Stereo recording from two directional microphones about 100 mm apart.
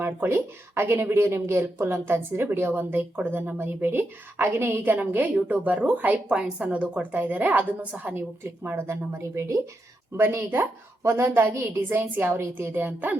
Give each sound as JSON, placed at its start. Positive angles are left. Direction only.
{"t": 0.0, "sound": "speech", "side_deg": -20}